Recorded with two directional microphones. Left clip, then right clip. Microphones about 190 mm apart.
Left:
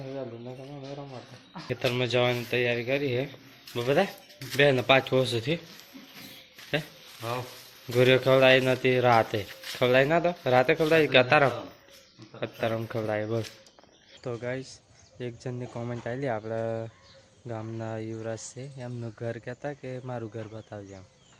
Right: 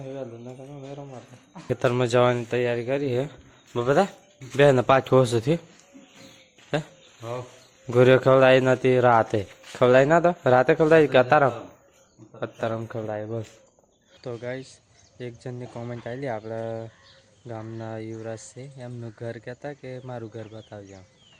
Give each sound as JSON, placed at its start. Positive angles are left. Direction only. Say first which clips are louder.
{"t": 0.1, "sound": "a sound", "louder": "right 1 dB", "side_deg": -10}
{"t": 1.7, "sound": "a man's voice", "louder": "right 5 dB", "side_deg": -25}
{"t": 6.7, "sound": "speech", "louder": "right 2 dB", "side_deg": -20}
{"t": 7.2, "sound": "speech", "louder": "even", "side_deg": 0}
{"t": 7.9, "sound": "a man's voice", "louder": "right 4 dB", "side_deg": -25}
{"t": 12.9, "sound": "speech", "louder": "left 1 dB", "side_deg": 0}